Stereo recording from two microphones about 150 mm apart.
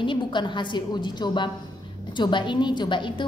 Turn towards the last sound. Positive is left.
turn(degrees=30)  # may be behind; listen again after turning